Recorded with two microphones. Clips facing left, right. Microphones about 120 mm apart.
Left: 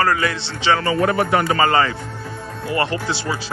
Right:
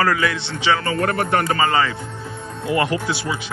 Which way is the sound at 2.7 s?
15° right (ahead or behind).